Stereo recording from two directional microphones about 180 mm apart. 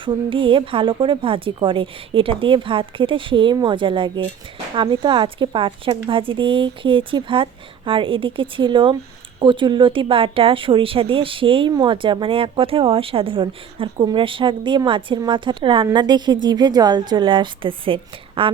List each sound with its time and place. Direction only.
0.0 s speech: 30° right (ahead or behind)